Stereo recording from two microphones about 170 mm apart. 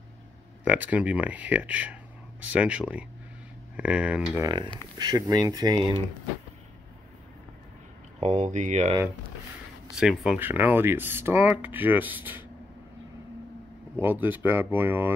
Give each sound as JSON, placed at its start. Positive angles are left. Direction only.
{"t": 0.7, "sound": "speech", "side_deg": -10}
{"t": 4.4, "sound": "speech", "side_deg": -25}
{"t": 8.2, "sound": "speech", "side_deg": -45}
{"t": 9.9, "sound": "speech", "side_deg": -5}
{"t": 13.9, "sound": "speech", "side_deg": -10}